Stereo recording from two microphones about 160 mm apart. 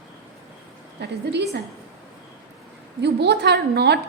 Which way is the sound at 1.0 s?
90° right.